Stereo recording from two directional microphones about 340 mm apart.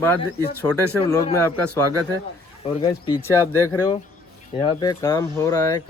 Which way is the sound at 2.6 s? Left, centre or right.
Centre.